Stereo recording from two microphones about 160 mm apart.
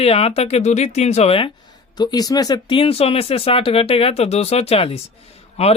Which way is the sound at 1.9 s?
25° left (ahead or behind).